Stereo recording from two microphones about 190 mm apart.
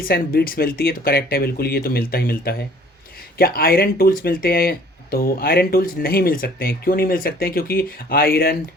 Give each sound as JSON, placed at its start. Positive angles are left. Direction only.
{"t": 0.0, "sound": "speech", "side_deg": 50}